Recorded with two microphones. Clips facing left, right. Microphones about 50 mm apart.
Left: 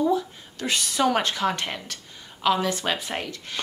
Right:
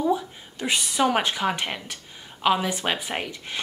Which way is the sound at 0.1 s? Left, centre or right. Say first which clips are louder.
Left 1 dB; centre.